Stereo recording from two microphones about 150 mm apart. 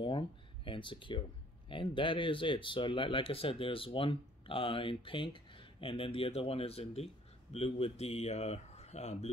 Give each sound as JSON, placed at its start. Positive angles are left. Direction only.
{"t": 0.7, "sound": "speech", "side_deg": 35}